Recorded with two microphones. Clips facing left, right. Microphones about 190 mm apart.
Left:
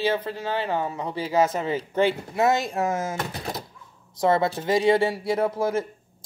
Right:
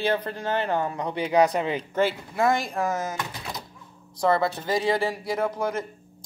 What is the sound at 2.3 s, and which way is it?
Speech, 25° left (ahead or behind).